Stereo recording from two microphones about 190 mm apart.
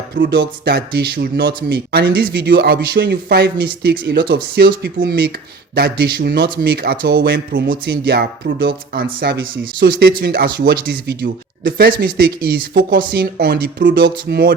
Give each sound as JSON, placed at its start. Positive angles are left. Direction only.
{"t": 0.2, "sound": "speech", "side_deg": -60}